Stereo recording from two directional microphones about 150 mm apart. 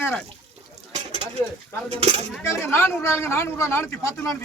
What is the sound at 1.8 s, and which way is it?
Speech, 45° right (ahead or behind).